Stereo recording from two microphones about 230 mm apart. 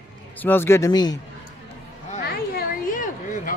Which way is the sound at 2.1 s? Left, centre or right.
Left.